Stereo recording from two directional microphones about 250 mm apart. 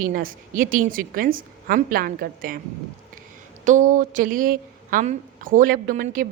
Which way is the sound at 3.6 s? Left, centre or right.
Right.